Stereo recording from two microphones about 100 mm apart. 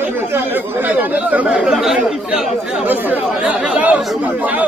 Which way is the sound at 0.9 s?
15° right (ahead or behind).